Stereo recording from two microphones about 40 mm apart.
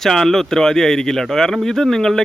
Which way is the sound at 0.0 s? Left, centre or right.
Centre.